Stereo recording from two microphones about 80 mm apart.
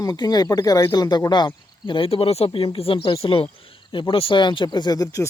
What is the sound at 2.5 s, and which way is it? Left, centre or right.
Speech, left.